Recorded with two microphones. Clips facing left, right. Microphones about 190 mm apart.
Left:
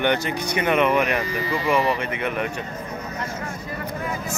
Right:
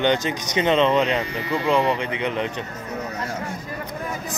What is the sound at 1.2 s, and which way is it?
Speech, 60° right (ahead or behind).